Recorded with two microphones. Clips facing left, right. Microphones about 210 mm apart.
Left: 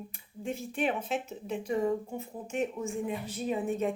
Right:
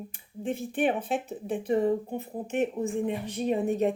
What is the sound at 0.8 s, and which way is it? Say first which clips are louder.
Speech: right 4 dB; 55° right (ahead or behind).